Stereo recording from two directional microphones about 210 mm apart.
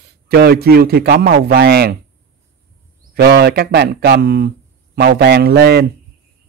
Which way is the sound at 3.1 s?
50° right (ahead or behind).